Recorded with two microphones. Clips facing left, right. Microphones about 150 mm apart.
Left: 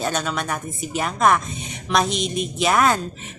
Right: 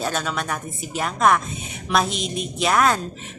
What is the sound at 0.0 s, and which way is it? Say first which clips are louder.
Speech: left 1 dB; centre (ahead or behind).